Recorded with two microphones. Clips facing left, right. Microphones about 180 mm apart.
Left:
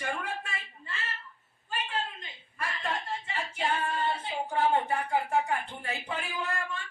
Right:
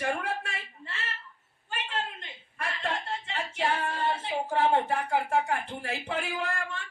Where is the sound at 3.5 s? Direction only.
70° right (ahead or behind).